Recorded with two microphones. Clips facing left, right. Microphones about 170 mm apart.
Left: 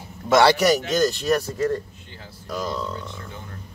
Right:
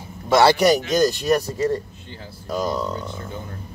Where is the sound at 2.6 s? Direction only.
40° right (ahead or behind).